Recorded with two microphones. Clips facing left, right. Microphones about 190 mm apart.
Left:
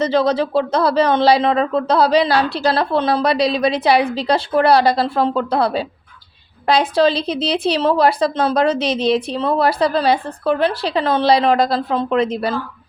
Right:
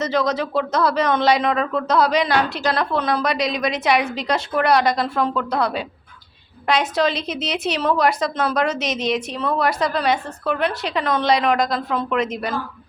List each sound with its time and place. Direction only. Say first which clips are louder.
0.0 s a woman's voice: left 5 dB; 30° left (ahead or behind)